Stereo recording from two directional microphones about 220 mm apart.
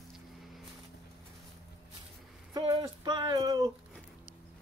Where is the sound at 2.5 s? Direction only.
15° right (ahead or behind).